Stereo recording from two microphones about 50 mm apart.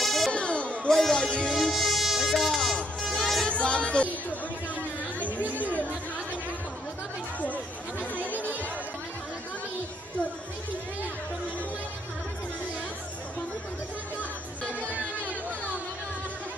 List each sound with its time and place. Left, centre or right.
0.0 s music: centre
0.3 s music: left
0.8 s speech: centre
1.1 s music: left
1.7 s music: centre
3.2 s music: centre
3.5 s speech: left
14.6 s music: left